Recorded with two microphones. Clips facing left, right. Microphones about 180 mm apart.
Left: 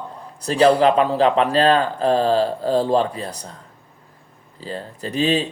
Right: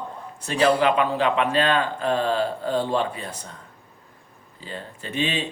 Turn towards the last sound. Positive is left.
turn(degrees=40)  # may be behind; listen again after turning